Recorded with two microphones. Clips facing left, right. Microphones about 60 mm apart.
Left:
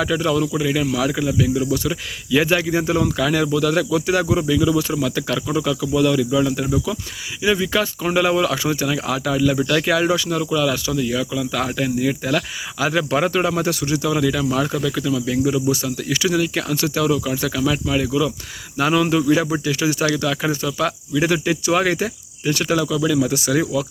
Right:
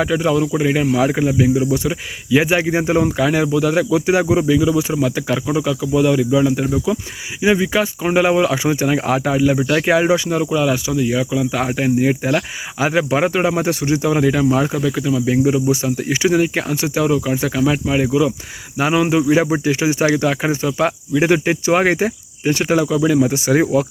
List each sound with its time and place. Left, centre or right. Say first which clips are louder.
0.0 s speech: right 3 dB; centre
9.6 s speech: right 2 dB; centre
9.8 s speech: right 4 dB; right